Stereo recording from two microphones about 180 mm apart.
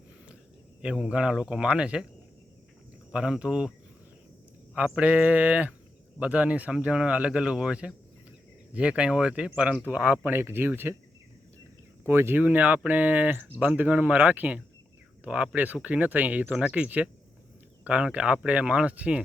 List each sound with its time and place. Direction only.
0.8 s speech: 5° right (ahead or behind)
3.1 s speech: 5° right (ahead or behind)
4.7 s speech: 5° right (ahead or behind)
12.0 s speech: 10° right (ahead or behind)